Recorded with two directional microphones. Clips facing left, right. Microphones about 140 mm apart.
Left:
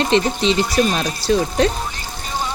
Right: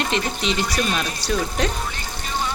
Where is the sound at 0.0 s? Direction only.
30° left (ahead or behind).